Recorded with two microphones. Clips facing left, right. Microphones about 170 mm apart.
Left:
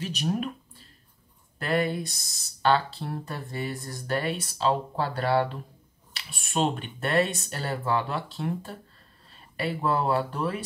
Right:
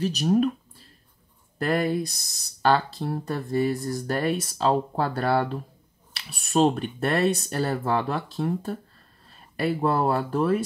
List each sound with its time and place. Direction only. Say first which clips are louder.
0.0 s speech: right 7 dB; 40° right (ahead or behind)
1.6 s speech: right 3 dB; 40° right (ahead or behind)